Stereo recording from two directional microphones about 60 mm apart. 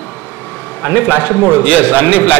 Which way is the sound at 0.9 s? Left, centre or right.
Left.